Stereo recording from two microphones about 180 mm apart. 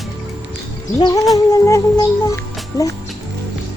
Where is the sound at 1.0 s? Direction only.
20° left (ahead or behind).